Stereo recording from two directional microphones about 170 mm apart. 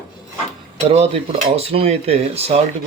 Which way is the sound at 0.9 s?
35° right (ahead or behind).